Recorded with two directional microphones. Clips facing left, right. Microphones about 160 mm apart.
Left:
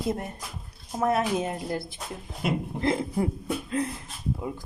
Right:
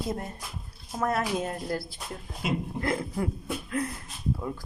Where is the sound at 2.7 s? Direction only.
25° left (ahead or behind).